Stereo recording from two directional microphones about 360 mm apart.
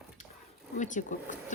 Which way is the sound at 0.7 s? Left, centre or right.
Left.